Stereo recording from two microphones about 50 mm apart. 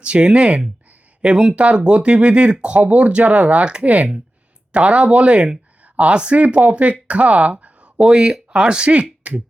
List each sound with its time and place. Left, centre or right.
0.0 s speech: right
9.2 s beatboxing: right